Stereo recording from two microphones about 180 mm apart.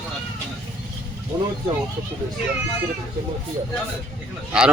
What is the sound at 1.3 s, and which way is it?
Speech, 15° right (ahead or behind).